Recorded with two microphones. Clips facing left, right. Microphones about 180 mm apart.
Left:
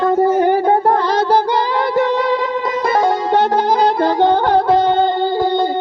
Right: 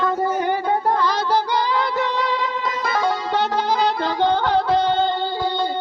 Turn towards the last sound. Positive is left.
turn(degrees=50)  # may be behind; listen again after turning